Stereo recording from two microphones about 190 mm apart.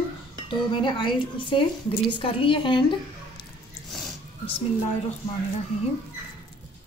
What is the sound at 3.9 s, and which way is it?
Music, centre (ahead or behind).